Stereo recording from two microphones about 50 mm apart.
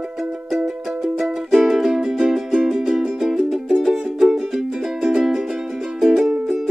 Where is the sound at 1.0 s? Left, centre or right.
Centre.